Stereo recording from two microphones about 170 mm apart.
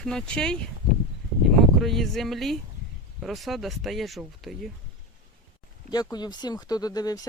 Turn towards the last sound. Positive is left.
turn(degrees=20)  # may be behind; listen again after turning